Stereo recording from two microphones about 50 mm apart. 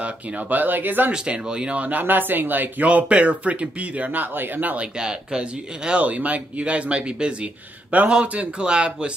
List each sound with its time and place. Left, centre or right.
0.0 s speech: right
1.1 s speech: centre; by 4.8 s right
4.9 s speech: centre